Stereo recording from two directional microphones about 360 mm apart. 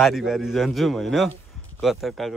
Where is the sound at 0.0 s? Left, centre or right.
Centre.